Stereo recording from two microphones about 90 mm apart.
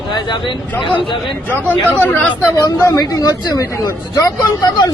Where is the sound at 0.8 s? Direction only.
70° left (ahead or behind).